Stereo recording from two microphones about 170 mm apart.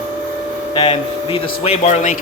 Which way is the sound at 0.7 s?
30° left (ahead or behind).